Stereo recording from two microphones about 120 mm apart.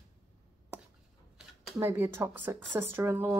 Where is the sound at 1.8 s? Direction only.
20° right (ahead or behind).